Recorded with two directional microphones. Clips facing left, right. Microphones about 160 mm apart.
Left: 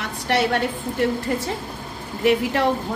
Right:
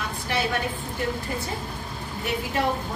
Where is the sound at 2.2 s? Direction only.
90° left.